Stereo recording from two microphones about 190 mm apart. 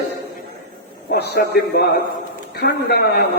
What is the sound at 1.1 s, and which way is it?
A man's voice, 55° left (ahead or behind).